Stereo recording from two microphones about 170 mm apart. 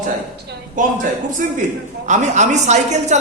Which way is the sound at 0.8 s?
50° right (ahead or behind).